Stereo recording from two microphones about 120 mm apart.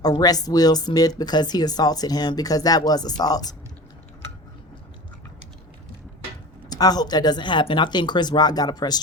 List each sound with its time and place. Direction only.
0.0 s speech: 30° left (ahead or behind)
6.7 s speech: 35° left (ahead or behind)